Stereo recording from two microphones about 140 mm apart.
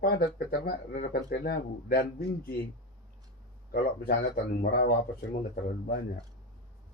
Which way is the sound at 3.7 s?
90° left.